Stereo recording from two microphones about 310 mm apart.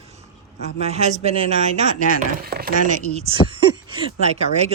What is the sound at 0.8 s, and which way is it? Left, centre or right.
A woman's voice, right.